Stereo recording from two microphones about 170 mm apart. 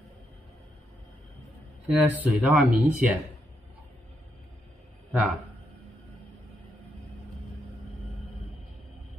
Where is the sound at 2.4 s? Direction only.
5° right (ahead or behind).